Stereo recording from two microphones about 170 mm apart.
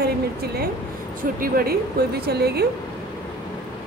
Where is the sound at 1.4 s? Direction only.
60° right (ahead or behind).